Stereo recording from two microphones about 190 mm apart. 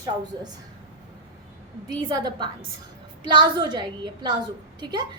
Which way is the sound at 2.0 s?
25° right (ahead or behind).